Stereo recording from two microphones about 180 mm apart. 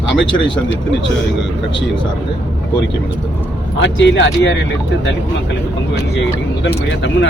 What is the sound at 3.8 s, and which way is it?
Speech, 85° left.